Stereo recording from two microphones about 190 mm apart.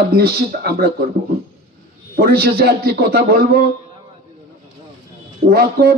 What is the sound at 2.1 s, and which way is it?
A man's voice, 55° right (ahead or behind).